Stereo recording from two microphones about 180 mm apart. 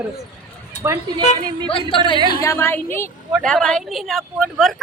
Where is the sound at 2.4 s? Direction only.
15° left (ahead or behind).